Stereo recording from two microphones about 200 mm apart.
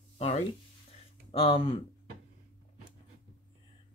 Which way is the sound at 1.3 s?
30° left (ahead or behind).